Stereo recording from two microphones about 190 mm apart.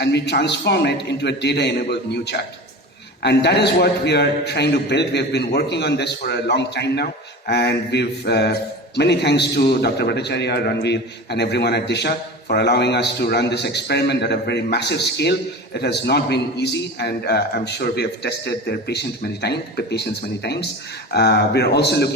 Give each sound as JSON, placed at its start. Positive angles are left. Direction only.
{"t": 0.0, "sound": "a man's voice", "side_deg": 60}